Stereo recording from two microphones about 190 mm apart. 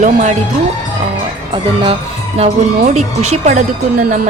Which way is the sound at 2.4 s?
35° right (ahead or behind).